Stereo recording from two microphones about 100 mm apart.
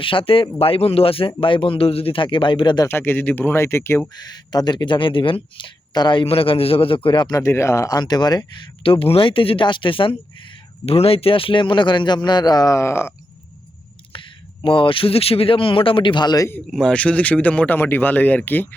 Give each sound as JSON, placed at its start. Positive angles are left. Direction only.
{"t": 0.0, "sound": "speech", "side_deg": 60}
{"t": 0.6, "sound": "speech", "side_deg": 75}
{"t": 2.8, "sound": "speech", "side_deg": 20}
{"t": 4.2, "sound": "speech", "side_deg": 45}
{"t": 6.2, "sound": "speech", "side_deg": 70}
{"t": 7.3, "sound": "speech", "side_deg": 30}
{"t": 8.8, "sound": "speech", "side_deg": 65}
{"t": 10.8, "sound": "speech", "side_deg": 80}
{"t": 14.6, "sound": "speech", "side_deg": 60}
{"t": 16.7, "sound": "speech", "side_deg": 10}